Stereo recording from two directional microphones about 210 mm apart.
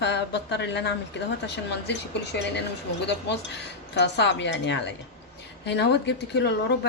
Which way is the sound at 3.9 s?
55° left (ahead or behind).